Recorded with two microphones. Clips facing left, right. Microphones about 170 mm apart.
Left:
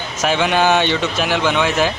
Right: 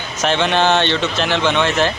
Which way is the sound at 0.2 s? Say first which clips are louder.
Even; 10° left (ahead or behind).